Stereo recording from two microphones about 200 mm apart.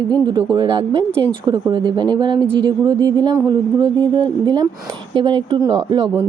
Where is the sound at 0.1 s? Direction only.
20° right (ahead or behind).